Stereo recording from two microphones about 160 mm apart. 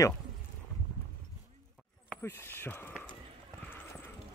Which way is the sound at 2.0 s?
10° left (ahead or behind).